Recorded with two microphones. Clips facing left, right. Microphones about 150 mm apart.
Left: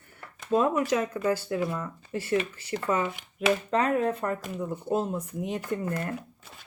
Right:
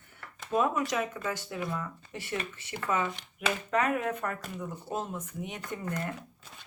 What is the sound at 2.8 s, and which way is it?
Speech, 30° left (ahead or behind).